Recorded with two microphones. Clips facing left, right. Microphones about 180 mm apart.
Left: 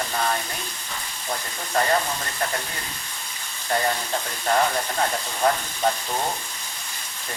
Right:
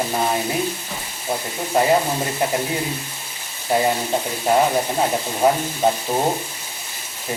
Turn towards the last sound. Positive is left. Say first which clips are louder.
# right 5 dB
turn(degrees=-30)  # may be behind; listen again after turning